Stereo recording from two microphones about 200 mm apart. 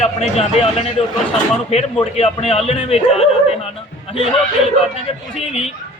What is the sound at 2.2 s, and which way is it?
A man's voice, 30° left (ahead or behind).